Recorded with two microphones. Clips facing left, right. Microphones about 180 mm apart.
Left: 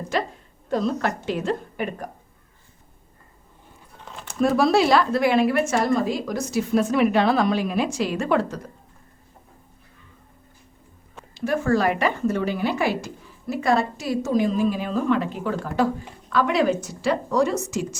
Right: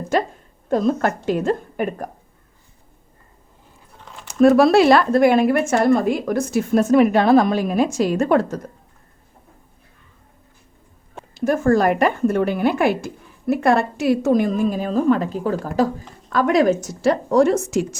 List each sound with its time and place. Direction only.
0.7 s a woman's voice: 50° right (ahead or behind)
4.0 s a sound: centre (ahead or behind)
4.4 s a woman's voice: 60° right (ahead or behind); by 8.7 s 45° right (ahead or behind)
11.1 s a woman's voice: 45° right (ahead or behind)